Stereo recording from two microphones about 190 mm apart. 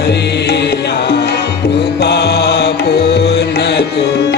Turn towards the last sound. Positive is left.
turn(degrees=60)  # may be behind; listen again after turning